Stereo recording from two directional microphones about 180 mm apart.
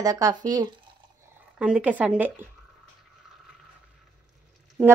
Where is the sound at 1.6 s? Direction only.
5° right (ahead or behind).